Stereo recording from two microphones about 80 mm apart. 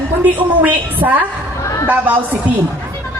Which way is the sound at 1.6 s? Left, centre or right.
Left.